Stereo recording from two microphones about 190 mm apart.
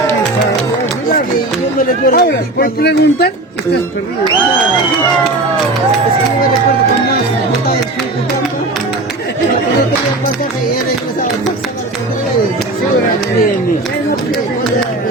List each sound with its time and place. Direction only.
2.0 s speech: 50° left (ahead or behind)